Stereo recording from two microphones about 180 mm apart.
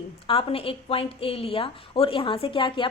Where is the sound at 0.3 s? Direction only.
30° left (ahead or behind).